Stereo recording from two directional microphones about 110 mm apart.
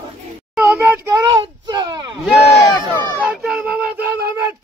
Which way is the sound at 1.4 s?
40° right (ahead or behind).